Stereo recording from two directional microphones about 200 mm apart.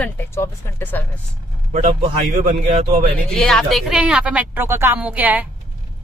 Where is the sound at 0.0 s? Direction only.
10° left (ahead or behind).